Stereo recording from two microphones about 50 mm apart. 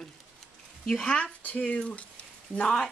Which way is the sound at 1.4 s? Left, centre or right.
Left.